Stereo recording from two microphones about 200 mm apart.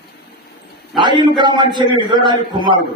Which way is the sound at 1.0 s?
20° right (ahead or behind).